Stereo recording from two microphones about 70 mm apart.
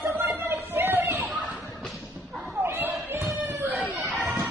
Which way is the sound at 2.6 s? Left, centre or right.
Right.